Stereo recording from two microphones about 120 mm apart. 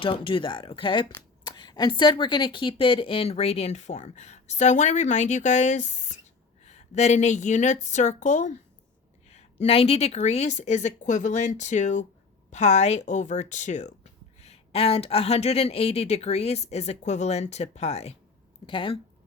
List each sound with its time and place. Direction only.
0.0 s a woman's voice: 45° left (ahead or behind); by 8.5 s 90° left
9.3 s speech: 65° left (ahead or behind); by 12.0 s 85° left
12.5 s speech: 75° left (ahead or behind)
18.6 s speech: 45° left (ahead or behind)